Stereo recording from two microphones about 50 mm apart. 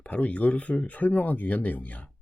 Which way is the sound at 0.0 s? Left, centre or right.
Left.